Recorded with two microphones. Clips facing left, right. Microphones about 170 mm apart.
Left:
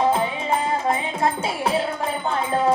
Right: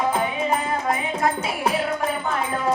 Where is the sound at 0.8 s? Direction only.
25° left (ahead or behind).